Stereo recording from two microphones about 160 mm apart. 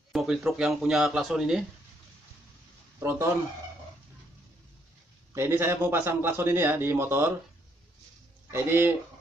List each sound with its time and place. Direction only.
0.1 s a man's voice: centre (ahead or behind)
3.0 s speech: 20° right (ahead or behind)
5.3 s a man's voice: 15° right (ahead or behind)
8.5 s speech: 15° right (ahead or behind)